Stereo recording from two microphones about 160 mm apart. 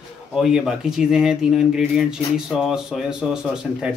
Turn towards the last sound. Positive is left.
turn(degrees=-5)  # may be behind; listen again after turning